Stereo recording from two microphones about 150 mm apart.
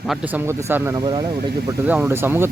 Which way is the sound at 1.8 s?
10° right (ahead or behind).